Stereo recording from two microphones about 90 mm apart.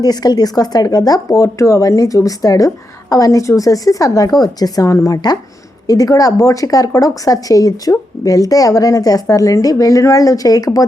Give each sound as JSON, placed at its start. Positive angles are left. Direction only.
{"t": 0.0, "sound": "speech", "side_deg": 50}